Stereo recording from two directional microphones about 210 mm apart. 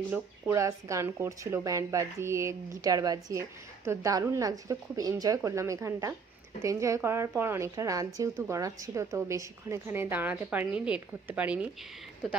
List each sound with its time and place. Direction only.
0.1 s speech: 15° right (ahead or behind)